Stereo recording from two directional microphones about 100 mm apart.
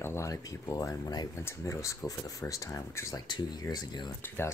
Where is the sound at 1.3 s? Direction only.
30° left (ahead or behind).